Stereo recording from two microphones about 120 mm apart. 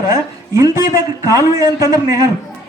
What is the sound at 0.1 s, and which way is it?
A man's voice, 25° right (ahead or behind).